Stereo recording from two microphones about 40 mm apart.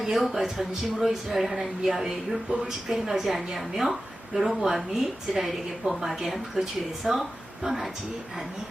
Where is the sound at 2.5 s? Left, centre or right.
Right.